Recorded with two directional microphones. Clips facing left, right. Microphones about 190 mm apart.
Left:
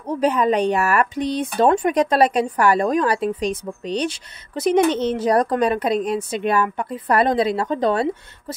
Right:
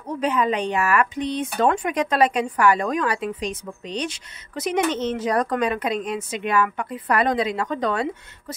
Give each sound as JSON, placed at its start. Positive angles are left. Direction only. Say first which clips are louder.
{"t": 0.0, "sound": "speech", "louder": "left 4 dB", "side_deg": 40}